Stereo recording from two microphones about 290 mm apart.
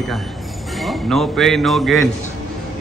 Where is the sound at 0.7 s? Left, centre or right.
Centre.